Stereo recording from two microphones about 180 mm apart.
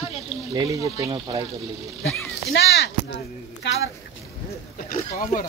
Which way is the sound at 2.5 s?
70° left (ahead or behind).